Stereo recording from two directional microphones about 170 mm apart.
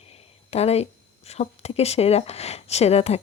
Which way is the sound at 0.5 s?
40° left (ahead or behind).